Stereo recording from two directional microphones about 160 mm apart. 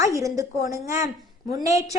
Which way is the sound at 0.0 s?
20° right (ahead or behind).